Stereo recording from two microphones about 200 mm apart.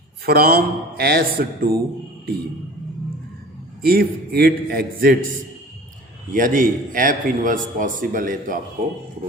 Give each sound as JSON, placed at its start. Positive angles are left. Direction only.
{"t": 0.3, "sound": "a man's voice", "side_deg": -50}
{"t": 3.8, "sound": "a man's voice", "side_deg": -50}
{"t": 6.3, "sound": "a man's voice", "side_deg": -40}